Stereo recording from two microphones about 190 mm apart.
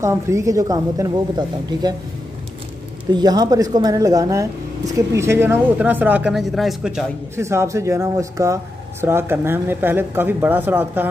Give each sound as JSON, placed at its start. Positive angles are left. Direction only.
{"t": 0.0, "sound": "speech", "side_deg": -15}
{"t": 3.1, "sound": "speech", "side_deg": -20}
{"t": 7.3, "sound": "speech", "side_deg": -15}